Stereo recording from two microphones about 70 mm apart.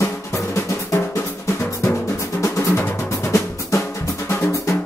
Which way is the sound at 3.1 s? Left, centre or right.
Left.